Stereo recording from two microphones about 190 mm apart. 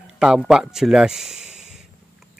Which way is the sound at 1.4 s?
35° right (ahead or behind).